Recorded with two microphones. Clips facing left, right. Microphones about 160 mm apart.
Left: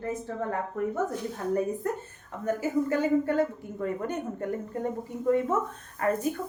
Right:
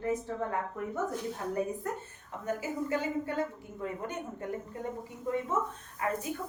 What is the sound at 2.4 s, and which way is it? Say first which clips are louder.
A woman's voice: left 7 dB; 45° left (ahead or behind).